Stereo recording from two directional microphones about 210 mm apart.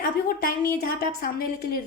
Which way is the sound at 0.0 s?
45° left (ahead or behind).